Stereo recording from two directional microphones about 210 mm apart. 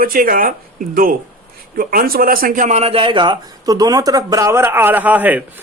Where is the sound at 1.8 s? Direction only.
45° right (ahead or behind).